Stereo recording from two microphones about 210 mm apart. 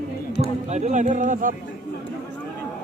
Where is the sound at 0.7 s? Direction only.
35° right (ahead or behind).